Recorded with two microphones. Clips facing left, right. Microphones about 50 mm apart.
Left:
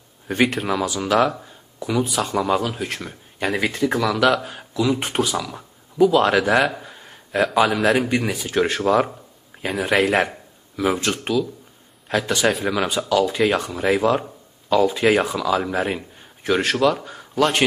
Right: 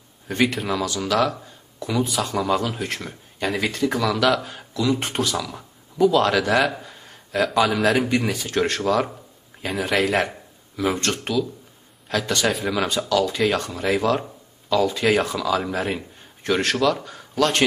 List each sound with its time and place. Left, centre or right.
0.3 s speech: centre
0.7 s speech: centre
1.4 s a sound: centre
2.0 s speech: centre
9.5 s a sound: centre
9.8 s speech: centre
12.4 s a man's voice: centre